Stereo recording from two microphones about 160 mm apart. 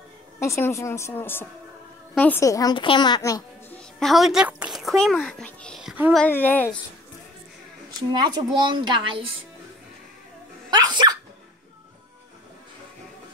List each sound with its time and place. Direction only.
0.4 s a woman's voice: 15° left (ahead or behind)
4.0 s a child's voice: centre (ahead or behind)
6.1 s a woman's voice: 10° left (ahead or behind)
8.1 s a woman's voice: 30° right (ahead or behind)
10.7 s sneeze: 25° right (ahead or behind)